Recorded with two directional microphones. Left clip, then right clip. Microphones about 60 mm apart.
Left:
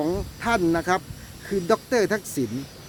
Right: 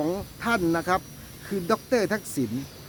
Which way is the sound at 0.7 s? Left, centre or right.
Centre.